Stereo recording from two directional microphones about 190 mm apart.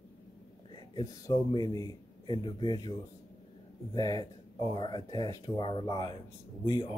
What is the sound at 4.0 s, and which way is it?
Speech, 20° left (ahead or behind).